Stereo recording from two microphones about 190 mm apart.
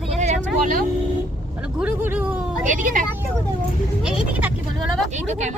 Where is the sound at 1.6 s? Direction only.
5° right (ahead or behind).